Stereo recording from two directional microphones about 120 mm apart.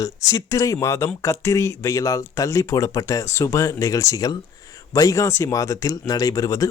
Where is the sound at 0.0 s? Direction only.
30° left (ahead or behind).